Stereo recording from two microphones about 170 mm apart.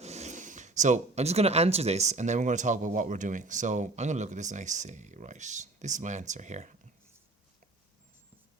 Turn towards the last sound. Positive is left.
turn(degrees=-45)  # may be behind; listen again after turning